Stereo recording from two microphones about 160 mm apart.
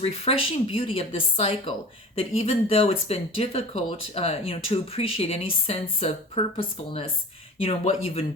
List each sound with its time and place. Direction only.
0.0 s speech: 40° left (ahead or behind)